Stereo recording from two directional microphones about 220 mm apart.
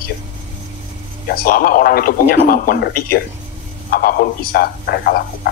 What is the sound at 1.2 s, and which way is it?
A man's voice, 45° left (ahead or behind).